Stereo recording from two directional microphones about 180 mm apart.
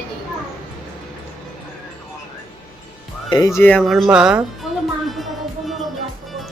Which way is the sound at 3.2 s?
20° left (ahead or behind).